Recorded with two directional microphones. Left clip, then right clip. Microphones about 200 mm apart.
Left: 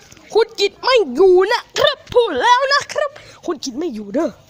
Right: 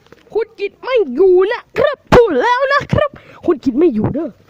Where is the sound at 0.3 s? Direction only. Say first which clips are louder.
Left 4 dB; 5° right (ahead or behind); by 4.0 s 25° right (ahead or behind).